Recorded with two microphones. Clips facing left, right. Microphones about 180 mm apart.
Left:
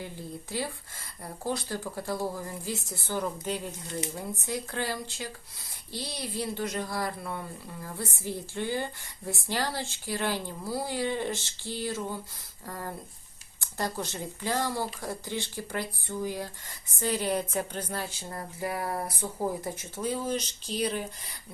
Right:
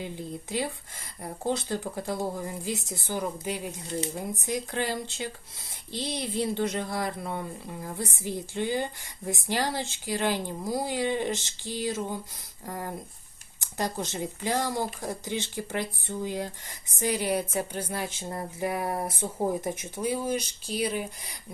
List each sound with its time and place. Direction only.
0.0 s speech: 20° right (ahead or behind)